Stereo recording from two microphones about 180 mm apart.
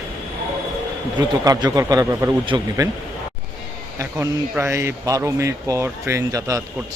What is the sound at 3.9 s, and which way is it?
Speech, 15° right (ahead or behind).